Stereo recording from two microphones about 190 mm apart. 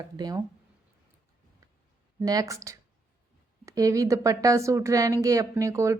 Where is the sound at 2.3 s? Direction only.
20° right (ahead or behind).